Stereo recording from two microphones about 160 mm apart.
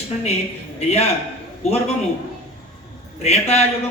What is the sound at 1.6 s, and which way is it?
Speech, 40° left (ahead or behind).